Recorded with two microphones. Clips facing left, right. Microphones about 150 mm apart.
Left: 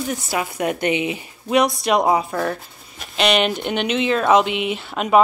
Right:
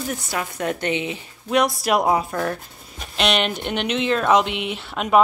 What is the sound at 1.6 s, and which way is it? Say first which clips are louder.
Speech: left 2 dB; 5° right (ahead or behind).